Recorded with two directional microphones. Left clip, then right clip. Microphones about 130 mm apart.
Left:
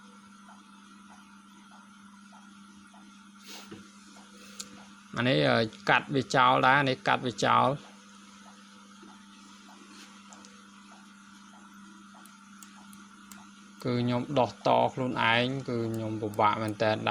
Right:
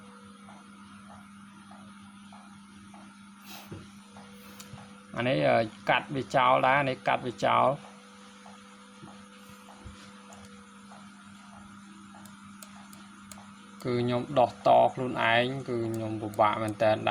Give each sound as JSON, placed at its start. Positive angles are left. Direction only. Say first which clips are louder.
{"t": 5.1, "sound": "speech", "louder": "right 1 dB", "side_deg": 50}
{"t": 13.8, "sound": "speech", "louder": "right 1 dB", "side_deg": 40}